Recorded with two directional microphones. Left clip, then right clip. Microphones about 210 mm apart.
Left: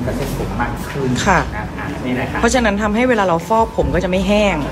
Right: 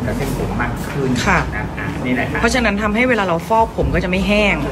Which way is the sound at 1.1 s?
10° left (ahead or behind).